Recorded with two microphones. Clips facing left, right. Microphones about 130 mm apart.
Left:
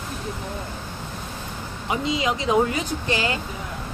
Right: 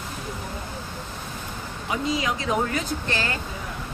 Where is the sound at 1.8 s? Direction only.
20° left (ahead or behind).